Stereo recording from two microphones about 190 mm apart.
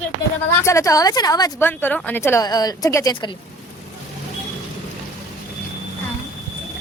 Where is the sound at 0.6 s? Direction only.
15° left (ahead or behind).